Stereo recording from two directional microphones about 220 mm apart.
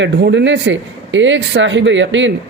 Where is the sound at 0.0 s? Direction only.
55° right (ahead or behind).